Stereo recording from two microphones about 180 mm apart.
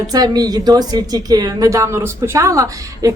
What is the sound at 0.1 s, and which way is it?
A woman's voice, 20° right (ahead or behind).